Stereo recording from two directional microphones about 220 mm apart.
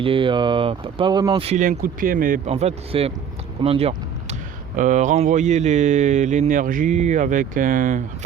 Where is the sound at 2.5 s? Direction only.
25° right (ahead or behind).